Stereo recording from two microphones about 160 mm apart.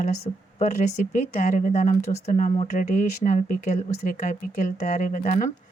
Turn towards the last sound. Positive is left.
turn(degrees=55)  # may be behind; listen again after turning